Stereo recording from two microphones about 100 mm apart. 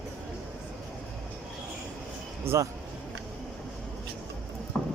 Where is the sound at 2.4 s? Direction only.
25° right (ahead or behind).